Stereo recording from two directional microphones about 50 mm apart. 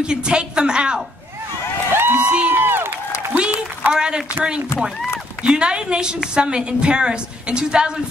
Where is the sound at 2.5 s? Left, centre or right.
Right.